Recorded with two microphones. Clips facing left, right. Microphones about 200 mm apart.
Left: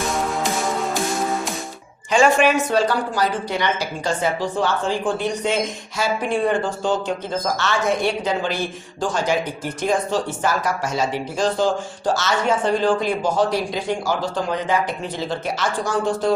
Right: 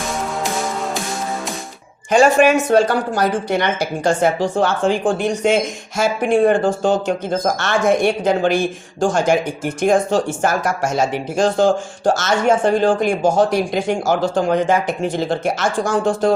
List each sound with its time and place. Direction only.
2.0 s speech: 45° right (ahead or behind)